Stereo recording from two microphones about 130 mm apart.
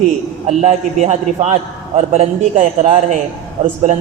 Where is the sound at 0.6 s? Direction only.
60° right (ahead or behind).